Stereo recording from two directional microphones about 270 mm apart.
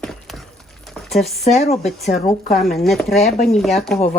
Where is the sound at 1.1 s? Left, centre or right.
Centre.